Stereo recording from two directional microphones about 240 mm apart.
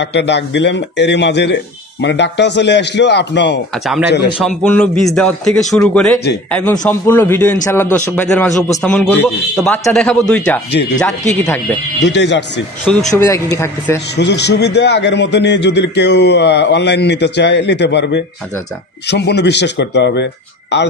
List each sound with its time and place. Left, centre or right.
0.0 s a man's voice: left
4.5 s a man's voice: centre
10.7 s a man's voice: left
11.0 s a man's voice: centre
12.0 s a man's voice: left
13.1 s a man's voice: centre
14.1 s a man's voice: left